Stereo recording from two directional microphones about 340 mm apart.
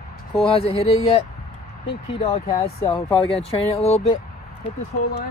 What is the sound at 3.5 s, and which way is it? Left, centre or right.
Speech, centre.